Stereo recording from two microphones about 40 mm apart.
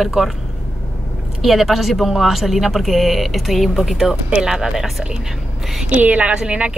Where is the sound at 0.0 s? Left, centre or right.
Centre.